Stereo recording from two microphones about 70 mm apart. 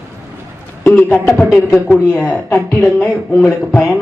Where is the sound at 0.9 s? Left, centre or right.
Left.